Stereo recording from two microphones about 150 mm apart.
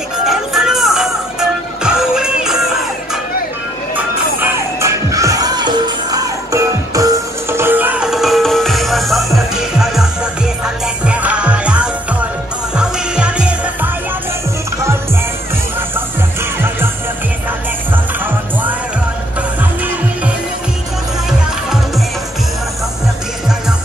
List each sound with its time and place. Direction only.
0.3 s music: 5° right (ahead or behind)
3.9 s music: 15° right (ahead or behind)
18.2 s music: 10° right (ahead or behind)